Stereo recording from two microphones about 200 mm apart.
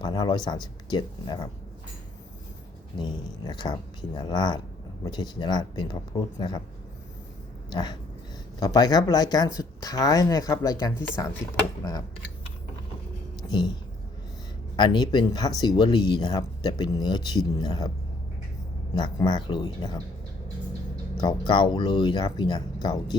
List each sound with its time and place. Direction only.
0.0 s speech: 20° left (ahead or behind)
3.0 s speech: 20° left (ahead or behind)
7.7 s speech: 20° left (ahead or behind)
14.8 s speech: 20° left (ahead or behind)
18.9 s speech: 20° left (ahead or behind)
21.2 s speech: 20° left (ahead or behind)